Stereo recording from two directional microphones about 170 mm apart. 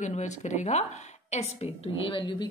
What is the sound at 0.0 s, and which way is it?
A woman's voice, 45° left (ahead or behind).